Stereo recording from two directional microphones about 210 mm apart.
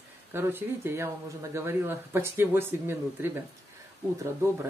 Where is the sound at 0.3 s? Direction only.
10° right (ahead or behind).